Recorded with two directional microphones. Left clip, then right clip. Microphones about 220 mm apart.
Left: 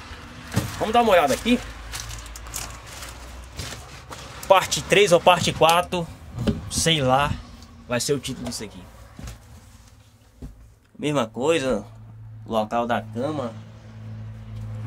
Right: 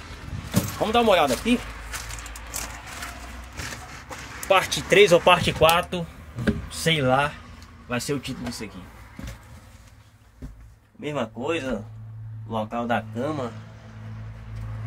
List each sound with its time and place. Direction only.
0.9 s speech: centre (ahead or behind)
4.5 s speech: 15° left (ahead or behind)
11.0 s speech: 25° left (ahead or behind)
12.8 s speech: 20° left (ahead or behind)
13.2 s speech: 5° left (ahead or behind)